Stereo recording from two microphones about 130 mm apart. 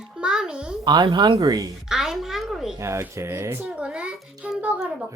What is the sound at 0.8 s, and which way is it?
Speech, 35° right (ahead or behind).